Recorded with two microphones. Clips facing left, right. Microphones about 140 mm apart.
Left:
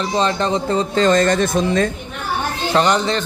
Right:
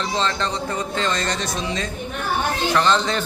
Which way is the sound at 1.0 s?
50° left (ahead or behind).